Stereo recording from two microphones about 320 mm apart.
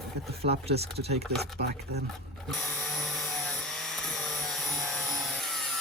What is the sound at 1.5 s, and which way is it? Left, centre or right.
Speech, right.